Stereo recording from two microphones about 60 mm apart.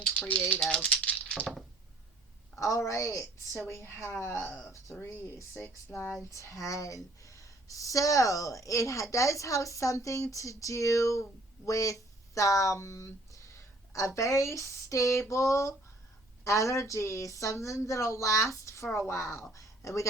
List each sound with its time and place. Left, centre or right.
0.0 s speech: left
0.6 s rattle: centre
2.6 s a woman's voice: left
4.7 s a woman's voice: left
5.9 s speech: left
6.3 s a woman's voice: left